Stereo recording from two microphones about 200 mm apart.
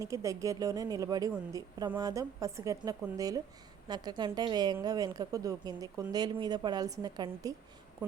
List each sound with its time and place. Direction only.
0.0 s a woman's voice: 15° right (ahead or behind)